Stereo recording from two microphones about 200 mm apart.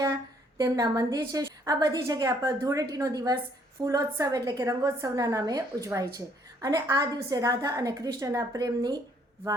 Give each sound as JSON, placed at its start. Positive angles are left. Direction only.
{"t": 0.6, "sound": "a woman's voice", "side_deg": -20}